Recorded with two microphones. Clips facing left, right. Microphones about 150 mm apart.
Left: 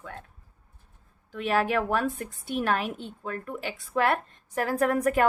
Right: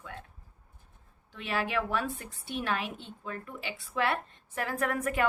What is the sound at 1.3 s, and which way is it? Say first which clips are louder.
A woman's voice: left 7 dB; 45° left (ahead or behind).